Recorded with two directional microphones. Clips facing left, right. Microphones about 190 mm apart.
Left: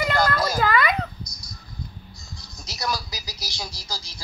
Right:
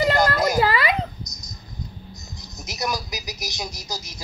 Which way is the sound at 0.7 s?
30° right (ahead or behind).